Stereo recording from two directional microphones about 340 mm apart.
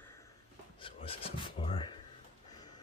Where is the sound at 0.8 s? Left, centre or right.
Centre.